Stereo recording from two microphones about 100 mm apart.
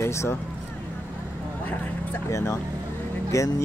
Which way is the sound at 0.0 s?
25° left (ahead or behind).